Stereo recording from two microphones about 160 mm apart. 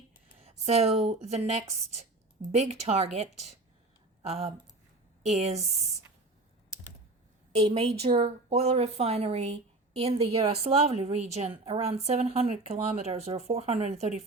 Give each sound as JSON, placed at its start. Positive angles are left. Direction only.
{"t": 0.3, "sound": "a woman's voice", "side_deg": -40}
{"t": 7.5, "sound": "a woman's voice", "side_deg": -40}